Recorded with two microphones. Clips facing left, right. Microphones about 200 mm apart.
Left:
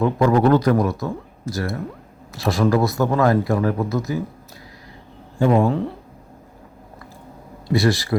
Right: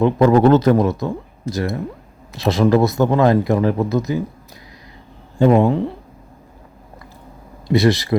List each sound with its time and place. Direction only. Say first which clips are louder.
0.0 s speech: right 4 dB; 20° right (ahead or behind)
5.4 s speech: right 4 dB; 20° right (ahead or behind)
7.7 s speech: right 3 dB; 20° right (ahead or behind)